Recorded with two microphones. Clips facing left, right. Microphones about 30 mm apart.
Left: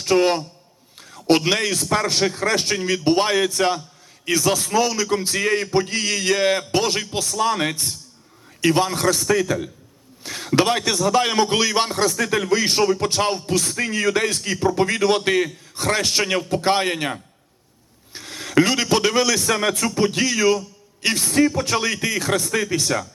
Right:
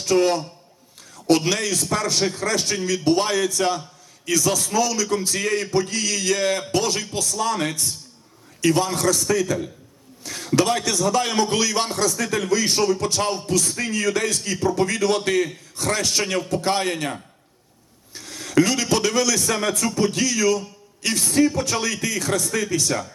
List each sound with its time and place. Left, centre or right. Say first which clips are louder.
0.0 s a man's voice: left 1 dB; left
0.9 s a sound: left 1 dB; left
1.5 s a man's voice: left 2 dB; left
13.7 s a man's voice: left 2 dB; left
21.6 s a man's voice: left 2 dB; left